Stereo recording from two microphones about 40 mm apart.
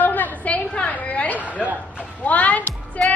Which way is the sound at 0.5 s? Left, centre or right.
Left.